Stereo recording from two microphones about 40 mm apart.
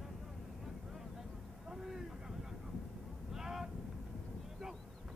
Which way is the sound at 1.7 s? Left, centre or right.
Centre.